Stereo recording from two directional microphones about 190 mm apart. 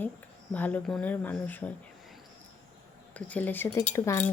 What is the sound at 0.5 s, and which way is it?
Speech, 10° left (ahead or behind).